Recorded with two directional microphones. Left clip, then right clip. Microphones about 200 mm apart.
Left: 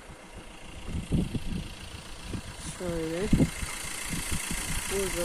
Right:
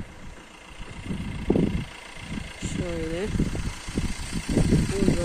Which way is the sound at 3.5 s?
45° right (ahead or behind).